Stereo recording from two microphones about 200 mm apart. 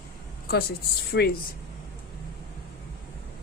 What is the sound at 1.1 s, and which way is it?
Speech, 55° left (ahead or behind).